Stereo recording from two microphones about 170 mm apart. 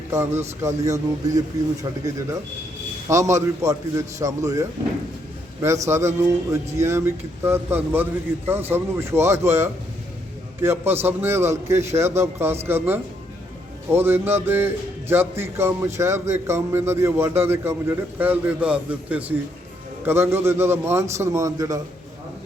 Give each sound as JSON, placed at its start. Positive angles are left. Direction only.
{"t": 0.1, "sound": "speech", "side_deg": -15}
{"t": 3.1, "sound": "a man's voice", "side_deg": -15}